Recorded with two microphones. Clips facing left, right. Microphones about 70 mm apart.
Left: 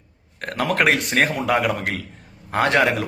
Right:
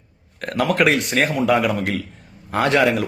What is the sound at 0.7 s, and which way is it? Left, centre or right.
A man's voice, left.